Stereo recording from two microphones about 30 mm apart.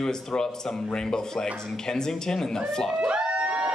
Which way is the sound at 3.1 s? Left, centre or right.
Right.